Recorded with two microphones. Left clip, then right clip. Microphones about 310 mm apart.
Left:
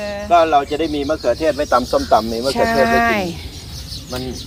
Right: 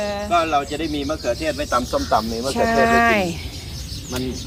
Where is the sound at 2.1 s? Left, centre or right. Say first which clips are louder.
Left 5 dB; left.